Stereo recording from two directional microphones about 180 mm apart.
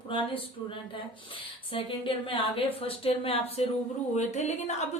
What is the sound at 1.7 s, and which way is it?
A woman's voice, 30° left (ahead or behind).